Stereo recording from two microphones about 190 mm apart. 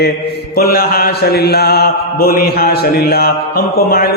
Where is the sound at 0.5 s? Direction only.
50° left (ahead or behind).